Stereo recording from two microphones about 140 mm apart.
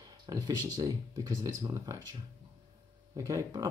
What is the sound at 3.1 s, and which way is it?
Speech, 25° right (ahead or behind).